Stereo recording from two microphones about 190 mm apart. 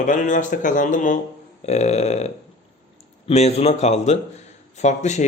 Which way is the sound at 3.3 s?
35° left (ahead or behind).